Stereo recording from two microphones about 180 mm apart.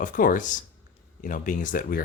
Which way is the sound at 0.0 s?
50° left (ahead or behind).